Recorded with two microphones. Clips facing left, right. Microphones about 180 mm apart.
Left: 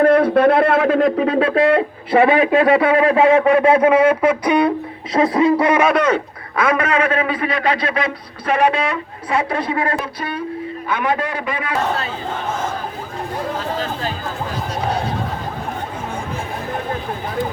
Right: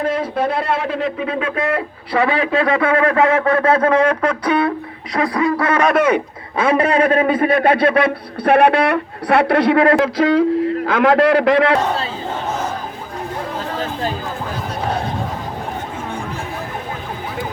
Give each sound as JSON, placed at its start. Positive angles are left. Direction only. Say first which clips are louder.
{"t": 0.0, "sound": "speech", "louder": "left 7 dB", "side_deg": 60}
{"t": 5.8, "sound": "speech", "louder": "right 1 dB", "side_deg": 0}
{"t": 6.6, "sound": "a man's voice", "louder": "right 3 dB", "side_deg": -30}